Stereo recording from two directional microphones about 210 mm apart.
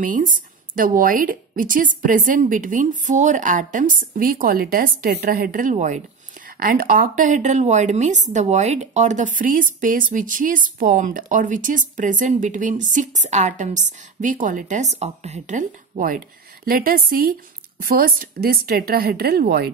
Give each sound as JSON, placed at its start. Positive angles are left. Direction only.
{"t": 0.0, "sound": "speech", "side_deg": -40}